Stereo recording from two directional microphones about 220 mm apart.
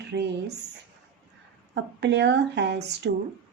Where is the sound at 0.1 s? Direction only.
50° right (ahead or behind).